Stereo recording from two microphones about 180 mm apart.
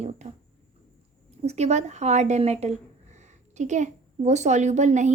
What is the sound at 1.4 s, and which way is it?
A woman's voice, 40° right (ahead or behind).